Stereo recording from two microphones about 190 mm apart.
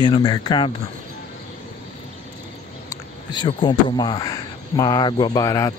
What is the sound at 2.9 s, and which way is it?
Speech, 25° left (ahead or behind).